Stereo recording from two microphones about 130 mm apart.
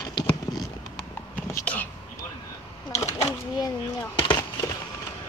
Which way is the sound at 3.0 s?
30° left (ahead or behind).